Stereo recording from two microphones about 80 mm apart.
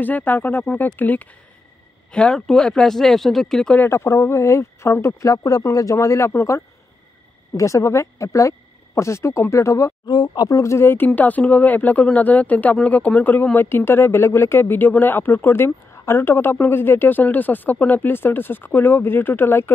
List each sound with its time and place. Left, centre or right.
0.0 s speech: left; by 3.7 s centre
3.9 s speech: left
10.0 s speech: left
10.6 s speech: left